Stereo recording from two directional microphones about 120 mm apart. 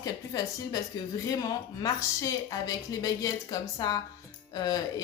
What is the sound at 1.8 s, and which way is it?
A woman's voice, 30° left (ahead or behind).